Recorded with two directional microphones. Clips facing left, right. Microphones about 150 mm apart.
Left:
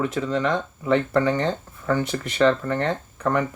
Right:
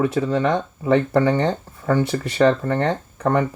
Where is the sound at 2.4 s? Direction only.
50° right (ahead or behind).